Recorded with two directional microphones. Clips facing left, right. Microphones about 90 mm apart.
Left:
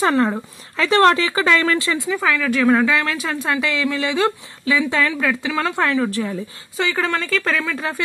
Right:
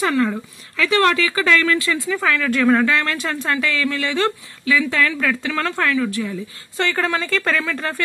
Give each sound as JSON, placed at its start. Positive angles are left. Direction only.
{"t": 0.0, "sound": "speech", "side_deg": 35}
{"t": 2.2, "sound": "a woman's voice", "side_deg": 5}
{"t": 3.4, "sound": "speech", "side_deg": 15}
{"t": 5.9, "sound": "speech", "side_deg": 40}
{"t": 6.8, "sound": "a woman's voice", "side_deg": 0}